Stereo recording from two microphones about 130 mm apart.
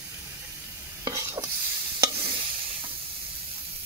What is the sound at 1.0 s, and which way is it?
Stir, 25° right (ahead or behind).